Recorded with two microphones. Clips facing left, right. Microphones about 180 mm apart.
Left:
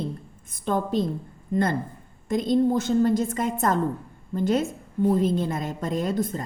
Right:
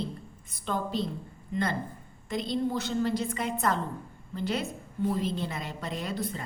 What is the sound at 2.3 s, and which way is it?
A woman's voice, 45° left (ahead or behind).